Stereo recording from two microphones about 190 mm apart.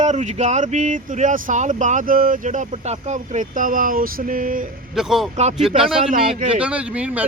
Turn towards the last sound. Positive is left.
turn(degrees=-5)  # may be behind; listen again after turning